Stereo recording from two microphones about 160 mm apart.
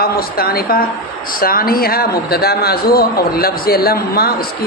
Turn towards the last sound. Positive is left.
turn(degrees=70)  # may be behind; listen again after turning